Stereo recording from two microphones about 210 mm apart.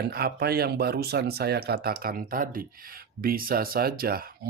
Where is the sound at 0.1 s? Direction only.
45° right (ahead or behind).